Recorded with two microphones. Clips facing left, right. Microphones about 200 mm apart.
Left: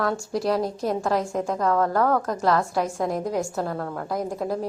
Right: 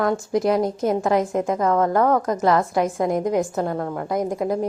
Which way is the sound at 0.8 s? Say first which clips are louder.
Right 4 dB; centre (ahead or behind).